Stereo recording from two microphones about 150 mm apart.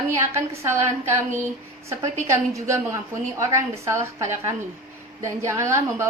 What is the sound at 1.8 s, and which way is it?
A woman's voice, 20° right (ahead or behind).